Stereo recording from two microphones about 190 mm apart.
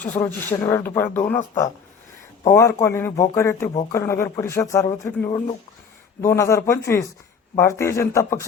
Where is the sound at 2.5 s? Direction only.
15° left (ahead or behind).